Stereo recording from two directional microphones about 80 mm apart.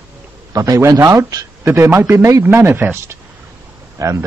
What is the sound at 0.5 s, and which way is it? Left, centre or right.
Speech, right.